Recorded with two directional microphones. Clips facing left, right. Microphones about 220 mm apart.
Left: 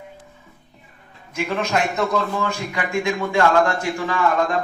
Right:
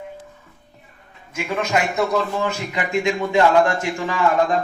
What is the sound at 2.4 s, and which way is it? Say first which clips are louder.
Speech: right 1 dB; 20° right (ahead or behind).